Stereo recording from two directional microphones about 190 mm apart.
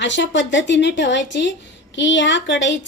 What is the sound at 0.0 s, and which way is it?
A woman's voice, 70° left (ahead or behind).